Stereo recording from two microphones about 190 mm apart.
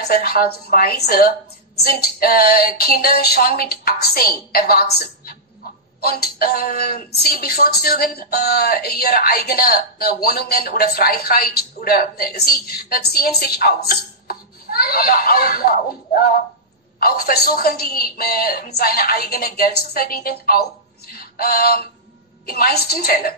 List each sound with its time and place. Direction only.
0.0 s speech: 55° left (ahead or behind)
21.1 s a sound: 50° left (ahead or behind)
22.5 s speech: 55° left (ahead or behind)